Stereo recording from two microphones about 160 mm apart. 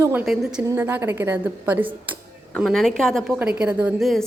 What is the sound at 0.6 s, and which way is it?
A woman's voice, 15° right (ahead or behind).